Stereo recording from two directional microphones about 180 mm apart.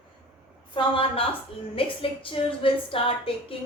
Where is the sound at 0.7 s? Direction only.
30° left (ahead or behind).